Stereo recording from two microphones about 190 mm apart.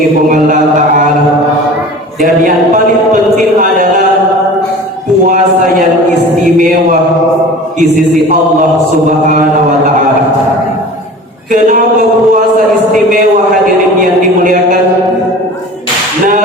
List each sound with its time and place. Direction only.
0.3 s chant: 45° right (ahead or behind)
3.6 s a sound: 45° right (ahead or behind)
9.0 s a man's voice: 45° right (ahead or behind)
11.5 s speech: 45° right (ahead or behind)